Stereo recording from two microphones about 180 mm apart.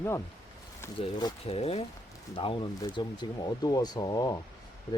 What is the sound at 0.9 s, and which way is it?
Speech, 30° left (ahead or behind).